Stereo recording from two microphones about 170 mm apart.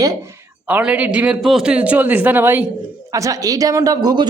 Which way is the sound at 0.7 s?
10° right (ahead or behind).